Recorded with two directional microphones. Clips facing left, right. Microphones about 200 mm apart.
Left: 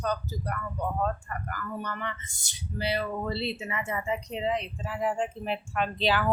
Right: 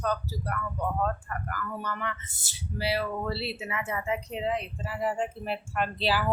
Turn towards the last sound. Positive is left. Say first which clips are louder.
# left 1 dB
turn(degrees=-5)  # may be behind; listen again after turning